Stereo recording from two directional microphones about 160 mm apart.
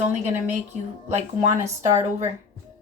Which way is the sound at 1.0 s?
45° right (ahead or behind).